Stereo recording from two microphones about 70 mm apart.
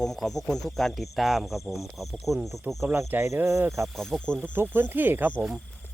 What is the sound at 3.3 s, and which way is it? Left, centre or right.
Speech, right.